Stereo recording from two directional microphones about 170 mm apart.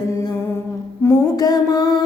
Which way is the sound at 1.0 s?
20° left (ahead or behind).